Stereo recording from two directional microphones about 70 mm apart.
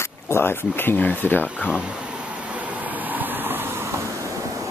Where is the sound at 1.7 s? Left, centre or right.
Centre.